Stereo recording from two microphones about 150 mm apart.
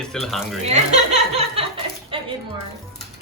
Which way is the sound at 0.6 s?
45° right (ahead or behind).